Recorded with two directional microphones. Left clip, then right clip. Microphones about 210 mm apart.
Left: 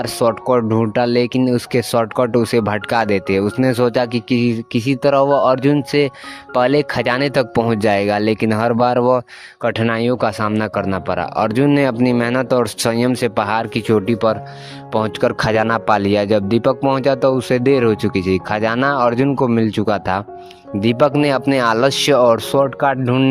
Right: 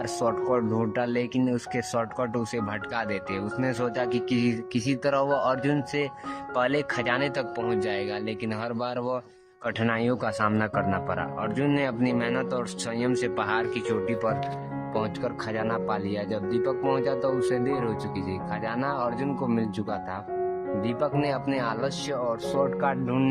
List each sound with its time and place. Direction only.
0.0 s speech: 35° left (ahead or behind)
1.4 s speech: 35° left (ahead or behind)
2.4 s speech: 55° left (ahead or behind)
5.0 s speech: 35° left (ahead or behind)
6.5 s speech: 55° left (ahead or behind)
9.6 s speech: 40° left (ahead or behind)
12.5 s speech: 55° left (ahead or behind); by 23.3 s 35° left (ahead or behind)